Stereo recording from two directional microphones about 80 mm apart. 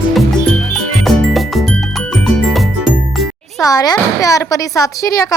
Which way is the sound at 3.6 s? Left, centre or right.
Left.